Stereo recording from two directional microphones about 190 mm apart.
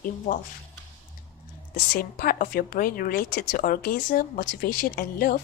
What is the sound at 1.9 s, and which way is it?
A woman's voice, 50° left (ahead or behind).